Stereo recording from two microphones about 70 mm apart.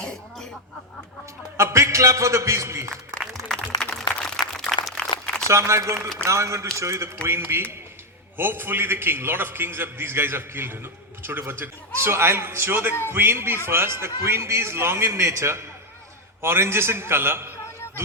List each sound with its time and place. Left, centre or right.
0.0 s cough: centre
1.5 s a man's voice: right
3.5 s a sound: centre
5.5 s a man's voice: right